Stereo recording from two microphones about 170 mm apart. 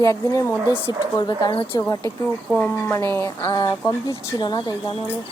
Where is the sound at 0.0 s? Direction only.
20° left (ahead or behind).